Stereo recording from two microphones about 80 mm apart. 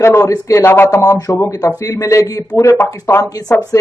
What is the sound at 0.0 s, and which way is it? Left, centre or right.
Speech, left.